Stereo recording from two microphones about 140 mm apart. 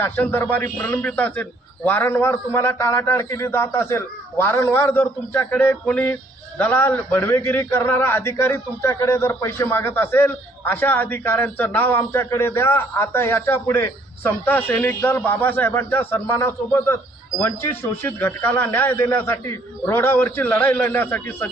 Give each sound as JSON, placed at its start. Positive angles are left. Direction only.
{"t": 0.0, "sound": "a man's voice", "side_deg": 15}